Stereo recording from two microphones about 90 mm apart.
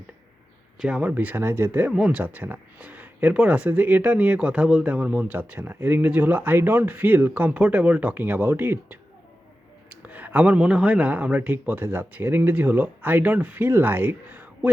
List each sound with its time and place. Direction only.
0.8 s speech: 10° right (ahead or behind)
1.9 s speech: 5° right (ahead or behind)
2.1 s speech: 20° right (ahead or behind)